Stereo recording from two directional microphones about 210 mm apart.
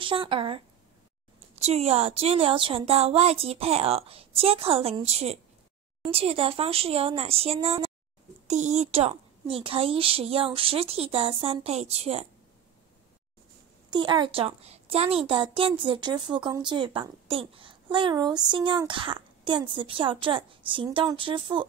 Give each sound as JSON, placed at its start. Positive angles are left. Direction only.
{"t": 0.0, "sound": "a child's voice", "side_deg": -25}
{"t": 1.6, "sound": "a child's voice", "side_deg": -30}
{"t": 13.9, "sound": "a child's voice", "side_deg": -20}